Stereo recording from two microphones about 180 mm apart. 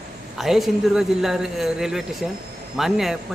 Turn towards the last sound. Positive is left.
turn(degrees=0)  # may be behind; listen again after turning